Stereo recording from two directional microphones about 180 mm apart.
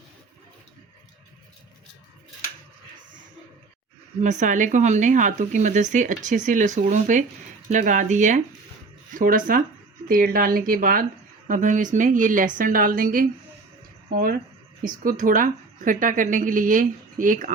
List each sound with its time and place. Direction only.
4.2 s speech: 45° right (ahead or behind)